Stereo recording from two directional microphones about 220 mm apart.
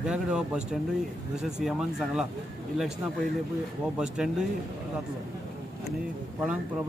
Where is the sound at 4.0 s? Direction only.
5° right (ahead or behind).